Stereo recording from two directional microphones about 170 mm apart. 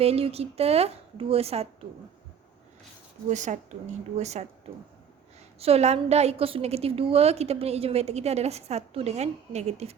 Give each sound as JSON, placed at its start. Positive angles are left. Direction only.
{"t": 0.0, "sound": "a woman's voice", "side_deg": -35}
{"t": 3.2, "sound": "a woman's voice", "side_deg": -45}
{"t": 5.5, "sound": "a woman's voice", "side_deg": -35}